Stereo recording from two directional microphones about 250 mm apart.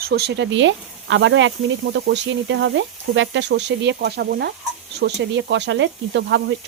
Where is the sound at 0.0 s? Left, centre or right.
Right.